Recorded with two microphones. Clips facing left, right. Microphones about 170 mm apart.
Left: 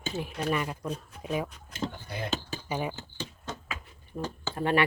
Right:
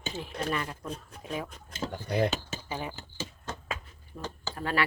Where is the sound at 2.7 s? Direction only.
15° left (ahead or behind).